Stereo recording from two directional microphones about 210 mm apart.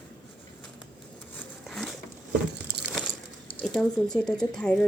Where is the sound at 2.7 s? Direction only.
50° right (ahead or behind).